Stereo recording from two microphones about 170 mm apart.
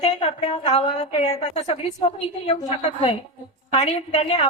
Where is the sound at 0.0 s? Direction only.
35° left (ahead or behind).